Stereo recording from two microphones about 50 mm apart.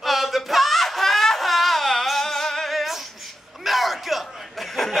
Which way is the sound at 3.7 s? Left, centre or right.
Centre.